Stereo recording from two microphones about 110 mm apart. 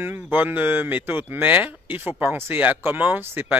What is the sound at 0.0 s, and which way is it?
Speech, 20° right (ahead or behind).